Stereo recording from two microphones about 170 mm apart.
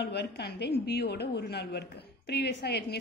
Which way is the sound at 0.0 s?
80° left.